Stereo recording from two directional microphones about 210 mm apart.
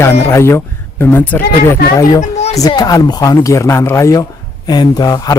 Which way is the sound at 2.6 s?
20° left (ahead or behind).